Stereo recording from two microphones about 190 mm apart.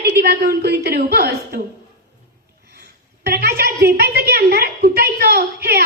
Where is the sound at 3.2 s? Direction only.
55° right (ahead or behind).